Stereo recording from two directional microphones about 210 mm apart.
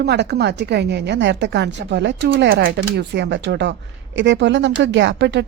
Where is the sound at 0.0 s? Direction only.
50° right (ahead or behind).